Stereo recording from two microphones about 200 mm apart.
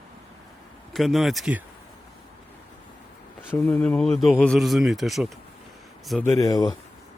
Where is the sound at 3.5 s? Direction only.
5° left (ahead or behind).